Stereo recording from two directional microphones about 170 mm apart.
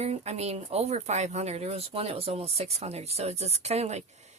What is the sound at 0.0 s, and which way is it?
A woman's voice, 40° right (ahead or behind).